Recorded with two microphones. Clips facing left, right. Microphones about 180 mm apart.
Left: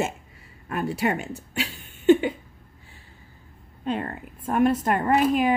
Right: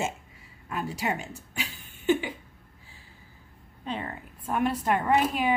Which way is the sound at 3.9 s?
50° left (ahead or behind).